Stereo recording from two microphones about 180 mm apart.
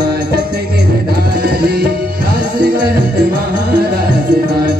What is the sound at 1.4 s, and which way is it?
Tabla, 65° right (ahead or behind).